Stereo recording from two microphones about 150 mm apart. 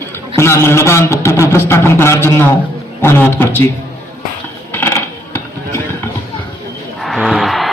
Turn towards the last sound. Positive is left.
turn(degrees=0)  # may be behind; listen again after turning